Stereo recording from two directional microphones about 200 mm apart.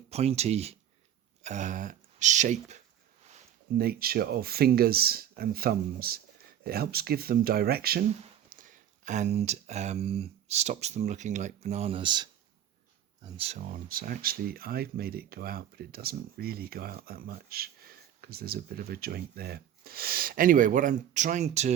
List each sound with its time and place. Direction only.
0.1 s speech: 30° right (ahead or behind)
3.8 s speech: 50° right (ahead or behind); by 21.7 s 35° right (ahead or behind)